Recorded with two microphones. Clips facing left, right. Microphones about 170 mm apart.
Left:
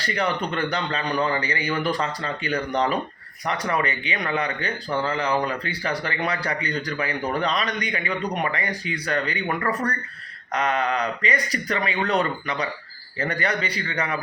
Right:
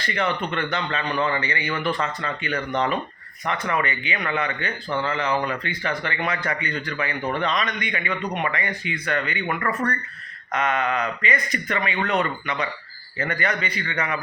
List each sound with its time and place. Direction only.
0.0 s speech: 35° left (ahead or behind)